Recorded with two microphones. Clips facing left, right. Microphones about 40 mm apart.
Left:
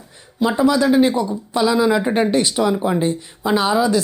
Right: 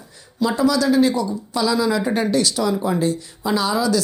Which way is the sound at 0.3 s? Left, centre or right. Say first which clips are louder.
Left 2 dB; left.